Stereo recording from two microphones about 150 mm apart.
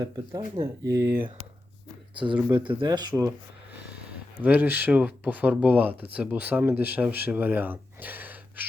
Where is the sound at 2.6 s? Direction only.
35° right (ahead or behind).